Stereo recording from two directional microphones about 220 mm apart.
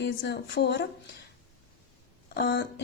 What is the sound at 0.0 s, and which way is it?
Speech, 55° left (ahead or behind).